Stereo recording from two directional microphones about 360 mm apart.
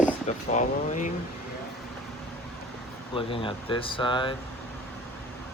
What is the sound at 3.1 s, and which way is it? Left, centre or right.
Speech, centre.